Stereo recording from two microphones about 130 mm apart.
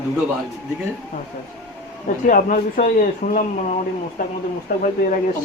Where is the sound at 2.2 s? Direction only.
85° left.